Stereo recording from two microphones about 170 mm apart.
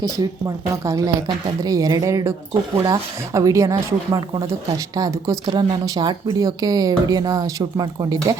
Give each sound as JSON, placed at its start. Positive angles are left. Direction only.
{"t": 0.2, "sound": "speech", "side_deg": -20}